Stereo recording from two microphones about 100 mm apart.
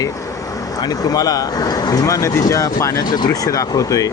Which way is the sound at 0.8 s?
40° left (ahead or behind).